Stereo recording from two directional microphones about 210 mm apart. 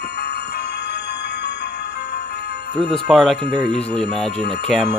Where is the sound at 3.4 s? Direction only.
20° right (ahead or behind).